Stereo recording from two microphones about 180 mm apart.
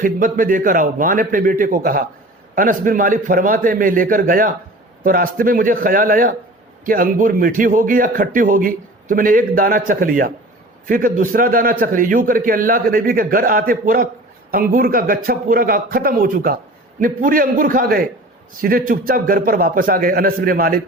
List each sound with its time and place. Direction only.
0.0 s a man's voice: 50° right (ahead or behind)